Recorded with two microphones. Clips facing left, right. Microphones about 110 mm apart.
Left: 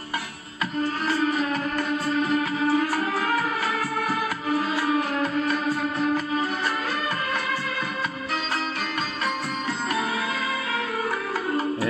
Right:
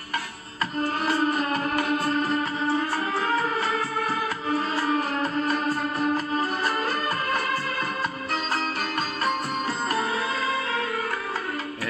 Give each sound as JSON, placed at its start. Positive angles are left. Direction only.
{"t": 0.8, "sound": "music", "side_deg": -50}
{"t": 2.0, "sound": "music", "side_deg": 5}
{"t": 4.7, "sound": "music", "side_deg": 5}